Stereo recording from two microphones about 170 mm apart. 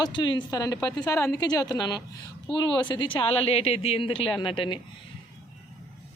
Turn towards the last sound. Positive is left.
turn(degrees=30)  # may be behind; listen again after turning